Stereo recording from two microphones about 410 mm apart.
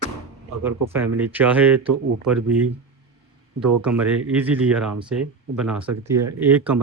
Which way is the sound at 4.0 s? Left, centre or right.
Centre.